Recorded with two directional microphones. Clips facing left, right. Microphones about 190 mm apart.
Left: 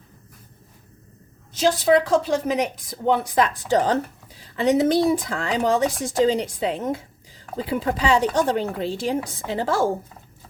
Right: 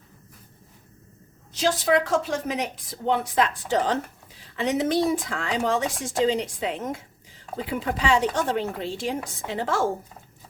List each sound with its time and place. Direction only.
1.8 s a woman's voice: 35° left (ahead or behind)